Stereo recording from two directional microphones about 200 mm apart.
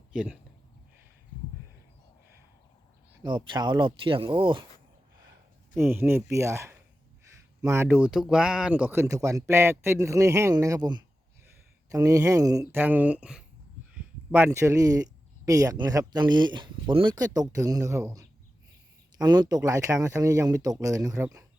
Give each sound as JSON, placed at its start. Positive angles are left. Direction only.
{"t": 0.1, "sound": "speech", "side_deg": -5}
{"t": 3.2, "sound": "speech", "side_deg": -25}
{"t": 5.7, "sound": "speech", "side_deg": -10}